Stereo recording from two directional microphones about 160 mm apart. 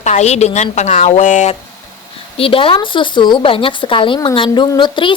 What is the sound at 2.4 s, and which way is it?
A woman's voice, 35° left (ahead or behind).